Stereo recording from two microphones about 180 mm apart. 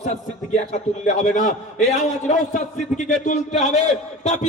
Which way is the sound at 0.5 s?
45° left (ahead or behind).